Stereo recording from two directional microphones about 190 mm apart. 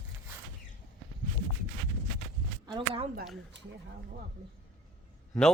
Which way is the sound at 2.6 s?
25° right (ahead or behind).